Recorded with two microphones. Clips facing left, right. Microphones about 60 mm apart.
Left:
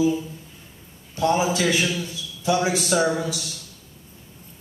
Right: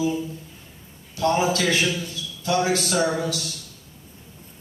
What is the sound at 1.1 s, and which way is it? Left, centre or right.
A man's voice, centre.